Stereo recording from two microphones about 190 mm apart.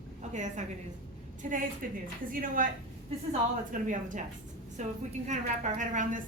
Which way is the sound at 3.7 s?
40° right (ahead or behind).